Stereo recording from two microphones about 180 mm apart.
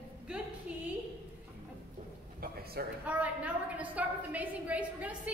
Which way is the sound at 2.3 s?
60° right (ahead or behind).